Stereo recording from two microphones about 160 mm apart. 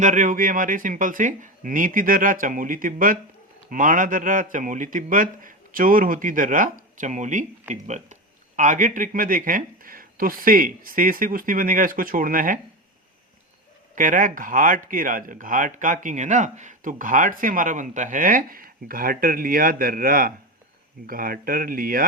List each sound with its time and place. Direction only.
0.0 s speech: 50° right (ahead or behind)
13.9 s speech: 55° right (ahead or behind)